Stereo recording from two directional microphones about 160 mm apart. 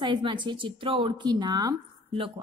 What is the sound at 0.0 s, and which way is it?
A woman's voice, 30° right (ahead or behind).